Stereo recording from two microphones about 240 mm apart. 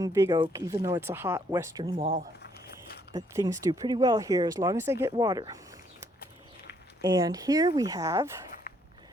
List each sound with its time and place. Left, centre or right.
0.0 s speech: centre
2.4 s a sound: left
3.1 s speech: centre
7.0 s speech: centre